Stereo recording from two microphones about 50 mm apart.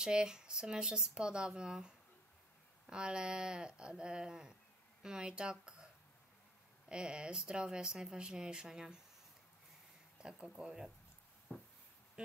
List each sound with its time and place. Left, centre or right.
0.0 s speech: centre
6.9 s speech: centre
10.1 s speech: centre
11.5 s a sound: left